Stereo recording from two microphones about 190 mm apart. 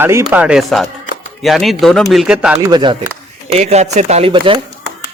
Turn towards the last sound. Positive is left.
turn(degrees=-30)  # may be behind; listen again after turning